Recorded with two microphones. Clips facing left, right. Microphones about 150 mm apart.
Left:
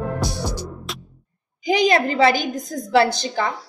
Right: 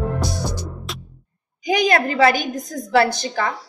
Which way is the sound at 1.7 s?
25° left (ahead or behind).